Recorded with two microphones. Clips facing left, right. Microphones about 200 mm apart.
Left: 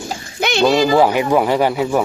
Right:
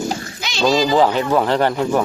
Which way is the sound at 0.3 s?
60° left (ahead or behind).